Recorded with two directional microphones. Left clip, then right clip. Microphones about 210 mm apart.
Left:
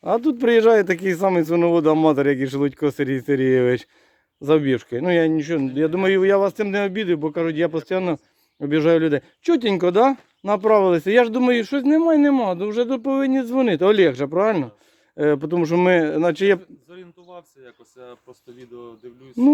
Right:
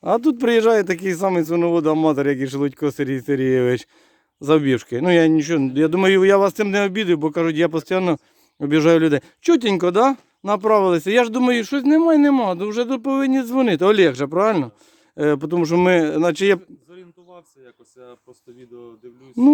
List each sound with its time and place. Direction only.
0.0 s speech: 20° right (ahead or behind)
4.4 s speech: 30° right (ahead or behind)
16.6 s speech: 5° left (ahead or behind)